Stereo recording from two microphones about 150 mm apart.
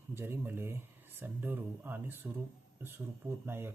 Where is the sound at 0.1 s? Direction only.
15° right (ahead or behind).